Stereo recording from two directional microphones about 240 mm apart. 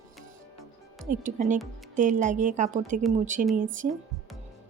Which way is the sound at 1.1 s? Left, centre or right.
Right.